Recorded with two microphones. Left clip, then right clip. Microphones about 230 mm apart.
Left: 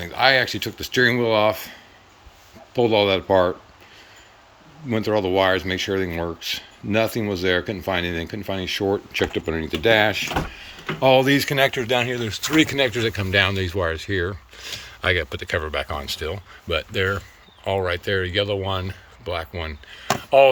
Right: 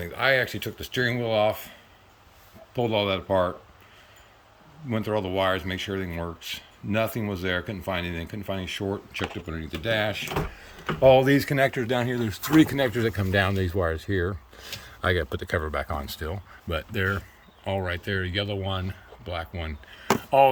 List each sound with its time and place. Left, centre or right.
0.0 s speech: centre
4.9 s speech: centre
11.0 s speech: centre